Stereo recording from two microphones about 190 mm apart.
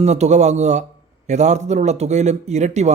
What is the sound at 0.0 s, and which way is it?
A man's voice, 35° right (ahead or behind).